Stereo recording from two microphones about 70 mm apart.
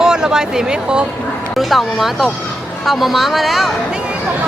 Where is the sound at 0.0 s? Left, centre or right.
Centre.